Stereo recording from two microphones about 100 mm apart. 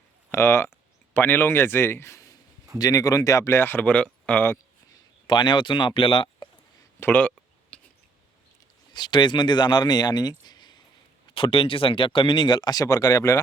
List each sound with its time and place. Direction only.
0.3 s speech: 25° left (ahead or behind)
5.2 s speech: 50° left (ahead or behind)
7.0 s a sound: 15° left (ahead or behind)
8.9 s speech: 50° left (ahead or behind)
11.3 s speech: 60° left (ahead or behind); by 13.4 s 30° left (ahead or behind)